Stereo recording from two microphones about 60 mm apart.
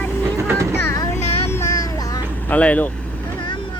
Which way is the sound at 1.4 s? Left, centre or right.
Left.